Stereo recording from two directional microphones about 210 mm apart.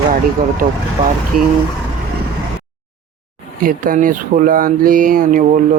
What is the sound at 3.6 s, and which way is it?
Speech, 40° right (ahead or behind).